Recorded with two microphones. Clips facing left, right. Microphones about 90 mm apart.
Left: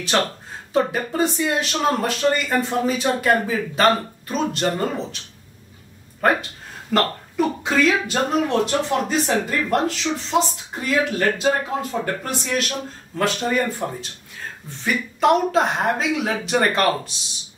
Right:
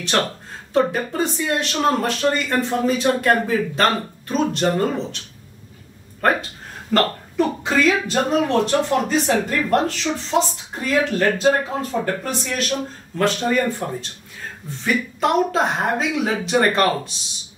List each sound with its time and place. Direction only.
0.7 s speech: centre (ahead or behind)
6.9 s speech: 5° left (ahead or behind)